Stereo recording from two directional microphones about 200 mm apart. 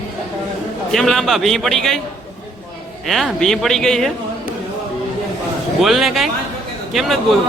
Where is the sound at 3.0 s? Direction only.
Centre (ahead or behind).